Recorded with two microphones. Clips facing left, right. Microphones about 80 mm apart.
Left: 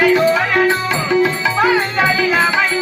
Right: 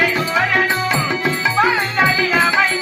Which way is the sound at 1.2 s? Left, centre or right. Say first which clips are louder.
Left 1 dB; centre.